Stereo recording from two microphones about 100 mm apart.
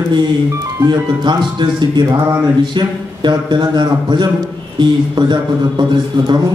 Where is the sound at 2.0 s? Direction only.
35° right (ahead or behind).